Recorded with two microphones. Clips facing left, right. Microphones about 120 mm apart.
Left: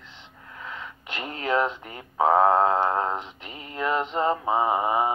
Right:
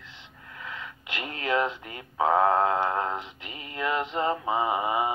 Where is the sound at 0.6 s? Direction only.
30° left (ahead or behind).